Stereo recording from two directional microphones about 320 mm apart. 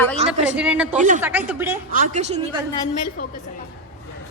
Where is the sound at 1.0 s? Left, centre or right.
Right.